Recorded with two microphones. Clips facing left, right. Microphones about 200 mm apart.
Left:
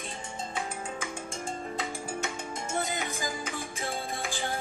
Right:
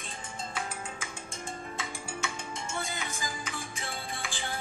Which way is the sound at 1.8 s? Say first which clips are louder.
Left 4 dB; 40° left (ahead or behind).